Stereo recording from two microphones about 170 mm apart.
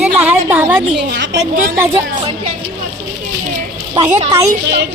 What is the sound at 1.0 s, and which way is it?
Speech, 85° right.